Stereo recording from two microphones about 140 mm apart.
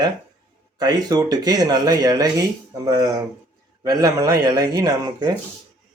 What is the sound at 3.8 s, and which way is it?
Speech, 25° right (ahead or behind).